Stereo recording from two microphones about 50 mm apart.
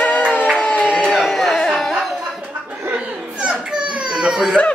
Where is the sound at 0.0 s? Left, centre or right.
Left.